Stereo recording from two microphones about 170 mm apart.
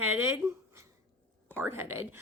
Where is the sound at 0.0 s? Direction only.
10° right (ahead or behind).